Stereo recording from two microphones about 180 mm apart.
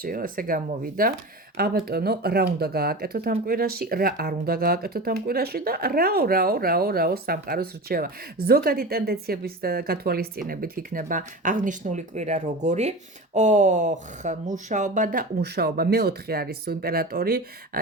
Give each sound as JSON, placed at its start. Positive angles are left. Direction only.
{"t": 0.0, "sound": "speech", "side_deg": -50}